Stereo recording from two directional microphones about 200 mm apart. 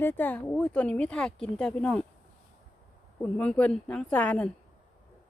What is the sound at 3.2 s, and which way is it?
Speech, 5° left (ahead or behind).